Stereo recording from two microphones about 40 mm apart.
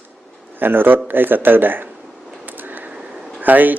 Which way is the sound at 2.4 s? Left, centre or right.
Right.